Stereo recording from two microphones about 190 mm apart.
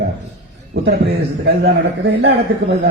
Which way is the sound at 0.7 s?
60° right (ahead or behind).